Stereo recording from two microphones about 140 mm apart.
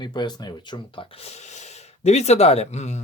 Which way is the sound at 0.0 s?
30° left (ahead or behind).